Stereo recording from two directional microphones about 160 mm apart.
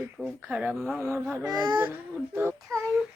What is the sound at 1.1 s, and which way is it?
Speech, 15° right (ahead or behind).